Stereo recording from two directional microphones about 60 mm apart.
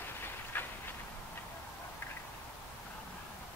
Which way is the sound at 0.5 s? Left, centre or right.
Left.